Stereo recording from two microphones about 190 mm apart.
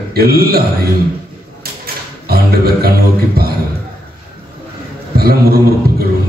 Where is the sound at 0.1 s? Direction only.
55° right (ahead or behind).